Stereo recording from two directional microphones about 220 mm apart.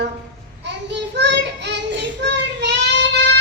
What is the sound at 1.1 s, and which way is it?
Child singing, 50° right (ahead or behind).